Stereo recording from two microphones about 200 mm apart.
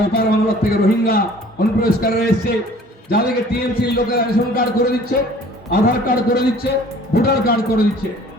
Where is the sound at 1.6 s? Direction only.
50° left (ahead or behind).